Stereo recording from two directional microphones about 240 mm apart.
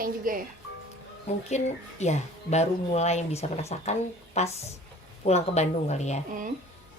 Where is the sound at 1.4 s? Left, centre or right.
Left.